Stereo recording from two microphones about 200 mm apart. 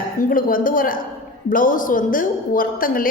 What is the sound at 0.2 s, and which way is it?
A man's voice, 45° left (ahead or behind).